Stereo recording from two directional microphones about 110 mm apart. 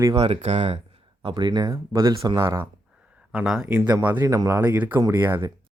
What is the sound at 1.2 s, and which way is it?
Speech, 40° right (ahead or behind).